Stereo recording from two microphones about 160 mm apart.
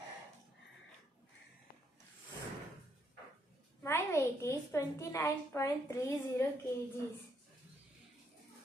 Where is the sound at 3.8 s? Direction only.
15° left (ahead or behind).